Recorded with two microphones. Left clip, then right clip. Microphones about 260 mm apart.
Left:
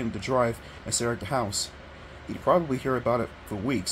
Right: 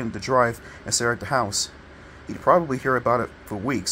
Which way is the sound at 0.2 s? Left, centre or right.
Centre.